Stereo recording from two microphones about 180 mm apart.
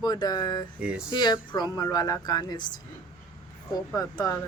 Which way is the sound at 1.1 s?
25° left (ahead or behind).